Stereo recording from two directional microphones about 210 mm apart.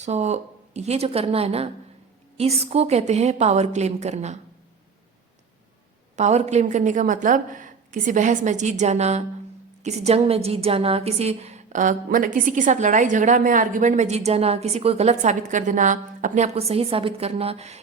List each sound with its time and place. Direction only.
0.0 s a woman's voice: 30° right (ahead or behind)
6.1 s a woman's voice: 35° right (ahead or behind)